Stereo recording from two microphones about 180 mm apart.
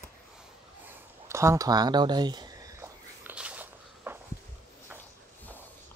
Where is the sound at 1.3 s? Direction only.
15° right (ahead or behind).